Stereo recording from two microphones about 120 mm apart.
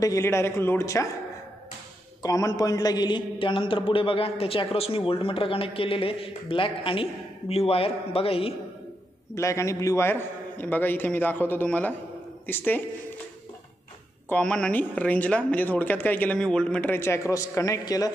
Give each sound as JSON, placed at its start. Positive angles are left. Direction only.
{"t": 0.0, "sound": "speech", "side_deg": 25}
{"t": 2.2, "sound": "a man's voice", "side_deg": 30}
{"t": 9.3, "sound": "speech", "side_deg": 25}
{"t": 14.3, "sound": "speech", "side_deg": 5}